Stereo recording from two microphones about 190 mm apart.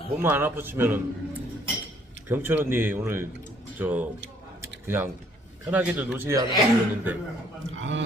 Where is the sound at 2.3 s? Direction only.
10° right (ahead or behind).